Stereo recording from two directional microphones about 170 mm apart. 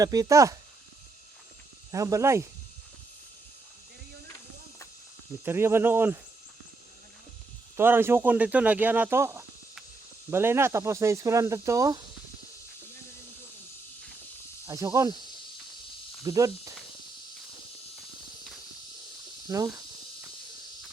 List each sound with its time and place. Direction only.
0.0 s speech: 20° right (ahead or behind)
1.9 s speech: 20° right (ahead or behind)
5.5 s speech: 15° right (ahead or behind)
7.8 s speech: 15° right (ahead or behind)
14.7 s speech: 20° right (ahead or behind)
16.2 s speech: 20° right (ahead or behind)
19.5 s speech: 20° right (ahead or behind)